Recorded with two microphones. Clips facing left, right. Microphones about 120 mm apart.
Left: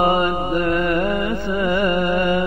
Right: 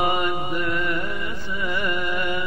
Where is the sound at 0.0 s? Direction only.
40° left (ahead or behind).